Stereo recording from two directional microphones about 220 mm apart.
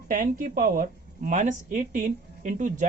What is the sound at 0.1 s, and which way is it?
Speech, 40° right (ahead or behind).